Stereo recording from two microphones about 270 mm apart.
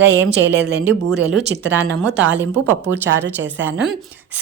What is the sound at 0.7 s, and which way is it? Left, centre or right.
A woman's voice, centre.